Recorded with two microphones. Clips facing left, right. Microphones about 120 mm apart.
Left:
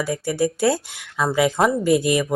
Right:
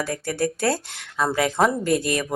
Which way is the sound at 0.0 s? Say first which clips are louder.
Left 3 dB; 10° left (ahead or behind).